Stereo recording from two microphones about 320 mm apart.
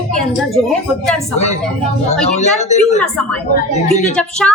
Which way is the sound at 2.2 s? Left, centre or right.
Left.